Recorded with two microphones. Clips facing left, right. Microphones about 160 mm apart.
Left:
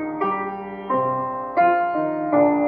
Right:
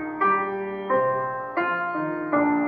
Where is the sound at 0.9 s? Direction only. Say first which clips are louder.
Left 1 dB; 20° left (ahead or behind).